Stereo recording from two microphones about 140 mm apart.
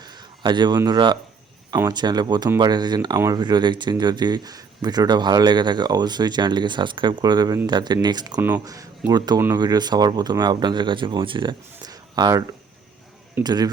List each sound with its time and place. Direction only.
0.0 s a sound: 30° right (ahead or behind)
0.9 s speech: 30° right (ahead or behind)
8.4 s speech: 15° right (ahead or behind)
8.6 s speech: 25° right (ahead or behind)
11.8 s a sound: 30° right (ahead or behind)
13.4 s speech: 30° right (ahead or behind)